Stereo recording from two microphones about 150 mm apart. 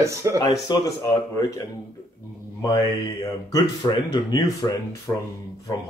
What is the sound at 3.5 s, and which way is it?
Speech, 30° left (ahead or behind).